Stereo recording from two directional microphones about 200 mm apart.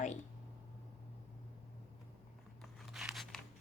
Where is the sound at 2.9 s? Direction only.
Centre (ahead or behind).